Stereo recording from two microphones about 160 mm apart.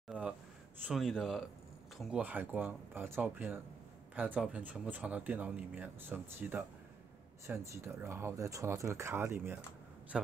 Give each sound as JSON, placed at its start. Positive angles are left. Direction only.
{"t": 0.1, "sound": "a sound", "side_deg": -10}
{"t": 0.8, "sound": "speech", "side_deg": 0}
{"t": 10.1, "sound": "a man's voice", "side_deg": 0}